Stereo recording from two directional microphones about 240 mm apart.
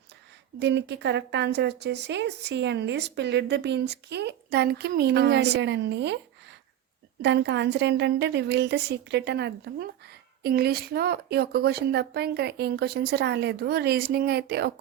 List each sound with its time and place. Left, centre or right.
0.6 s a woman's voice: right
7.2 s a woman's voice: right